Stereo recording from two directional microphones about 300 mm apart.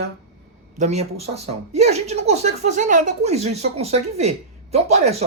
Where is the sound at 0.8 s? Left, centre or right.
Right.